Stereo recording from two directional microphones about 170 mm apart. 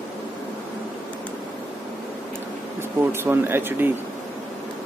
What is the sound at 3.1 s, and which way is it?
Speech, 15° right (ahead or behind).